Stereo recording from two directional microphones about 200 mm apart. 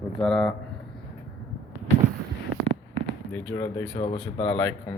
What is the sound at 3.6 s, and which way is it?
Speech, 20° left (ahead or behind).